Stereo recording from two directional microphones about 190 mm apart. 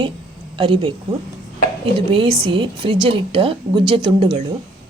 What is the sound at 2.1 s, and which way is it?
A woman's voice, 25° right (ahead or behind).